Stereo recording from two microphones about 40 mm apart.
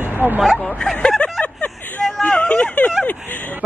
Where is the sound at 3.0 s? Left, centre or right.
Left.